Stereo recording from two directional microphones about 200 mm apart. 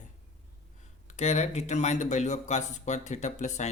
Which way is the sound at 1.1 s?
35° left (ahead or behind).